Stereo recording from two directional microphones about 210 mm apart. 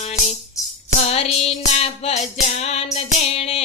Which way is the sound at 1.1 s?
30° left (ahead or behind).